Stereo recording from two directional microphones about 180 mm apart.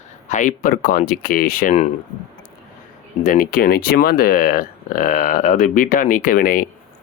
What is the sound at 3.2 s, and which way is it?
Speech, 50° left (ahead or behind).